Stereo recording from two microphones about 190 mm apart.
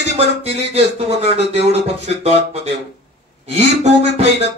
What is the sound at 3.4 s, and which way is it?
Speech, 35° right (ahead or behind).